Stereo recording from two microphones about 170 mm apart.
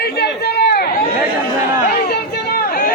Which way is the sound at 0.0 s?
75° left (ahead or behind).